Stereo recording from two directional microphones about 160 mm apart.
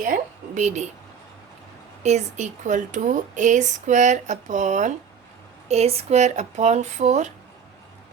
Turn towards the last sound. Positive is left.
turn(degrees=-45)  # may be behind; listen again after turning